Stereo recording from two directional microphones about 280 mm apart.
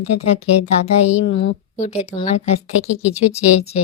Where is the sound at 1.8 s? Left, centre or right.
Left.